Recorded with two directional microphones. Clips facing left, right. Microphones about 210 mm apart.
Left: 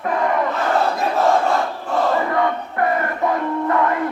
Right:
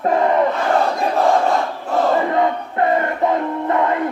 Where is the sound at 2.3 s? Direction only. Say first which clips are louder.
Right 2 dB; 25° right (ahead or behind).